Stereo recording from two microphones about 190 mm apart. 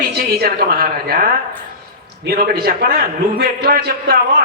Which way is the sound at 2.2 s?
50° right (ahead or behind).